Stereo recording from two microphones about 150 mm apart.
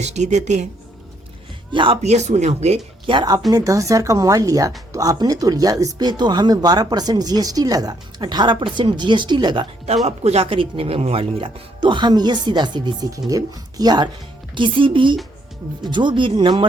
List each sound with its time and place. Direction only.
0.0 s speech: 50° right (ahead or behind)
1.7 s speech: 35° right (ahead or behind)
2.0 s speech: 50° right (ahead or behind)
3.1 s speech: 30° right (ahead or behind)
9.8 s speech: 45° right (ahead or behind)